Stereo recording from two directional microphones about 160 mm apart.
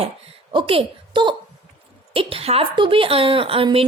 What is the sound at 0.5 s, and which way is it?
A woman's voice, 35° right (ahead or behind).